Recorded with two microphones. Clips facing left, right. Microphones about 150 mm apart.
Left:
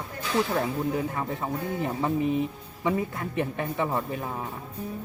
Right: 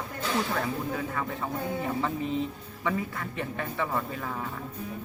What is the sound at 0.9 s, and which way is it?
Speech, 25° left (ahead or behind).